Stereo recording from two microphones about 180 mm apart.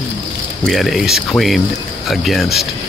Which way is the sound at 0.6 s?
Centre (ahead or behind).